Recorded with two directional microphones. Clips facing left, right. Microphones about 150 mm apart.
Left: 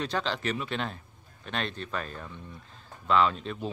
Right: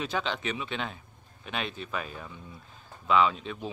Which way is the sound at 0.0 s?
Centre (ahead or behind).